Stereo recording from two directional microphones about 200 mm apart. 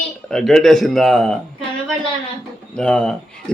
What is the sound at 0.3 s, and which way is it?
Speech, 5° left (ahead or behind).